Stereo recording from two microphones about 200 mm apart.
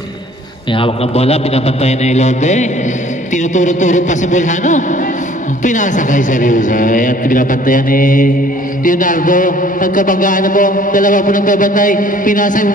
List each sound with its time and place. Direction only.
0.7 s a man's voice: 30° left (ahead or behind)